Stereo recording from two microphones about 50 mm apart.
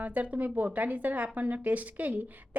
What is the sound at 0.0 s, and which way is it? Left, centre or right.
A woman's voice, right.